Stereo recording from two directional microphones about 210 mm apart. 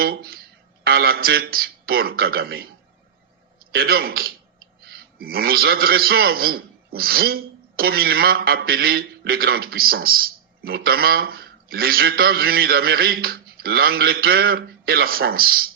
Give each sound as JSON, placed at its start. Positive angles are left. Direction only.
{"t": 0.0, "sound": "a man's voice", "side_deg": -45}